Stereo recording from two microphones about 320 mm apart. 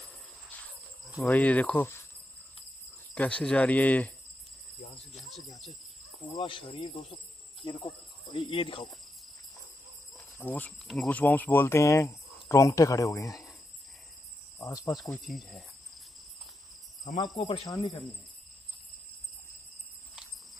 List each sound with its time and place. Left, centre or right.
1.1 s speech: centre
3.2 s speech: centre
5.1 s cricket: centre
6.3 s speech: centre
10.1 s speech: centre
14.6 s speech: centre
15.0 s speech: centre
17.4 s speech: centre